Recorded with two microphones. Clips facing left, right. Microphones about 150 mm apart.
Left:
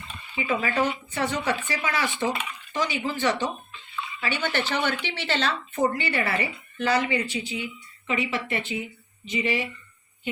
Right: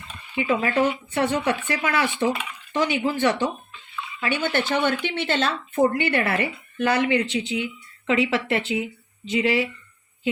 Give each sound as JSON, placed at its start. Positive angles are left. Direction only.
{"t": 0.3, "sound": "speech", "side_deg": -55}